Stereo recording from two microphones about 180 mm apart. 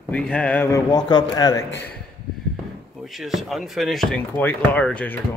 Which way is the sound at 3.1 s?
Centre (ahead or behind).